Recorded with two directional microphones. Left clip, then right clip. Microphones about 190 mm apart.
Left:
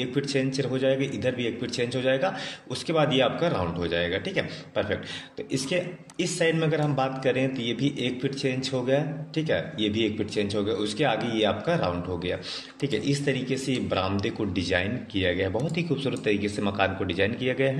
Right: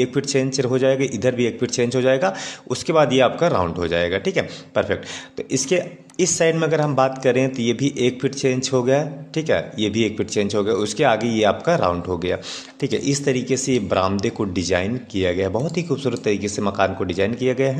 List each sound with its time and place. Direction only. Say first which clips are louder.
0.0 s a man's voice: right 7 dB; 45° right (ahead or behind)